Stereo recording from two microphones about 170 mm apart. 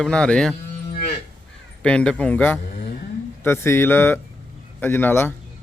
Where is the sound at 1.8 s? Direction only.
5° left (ahead or behind).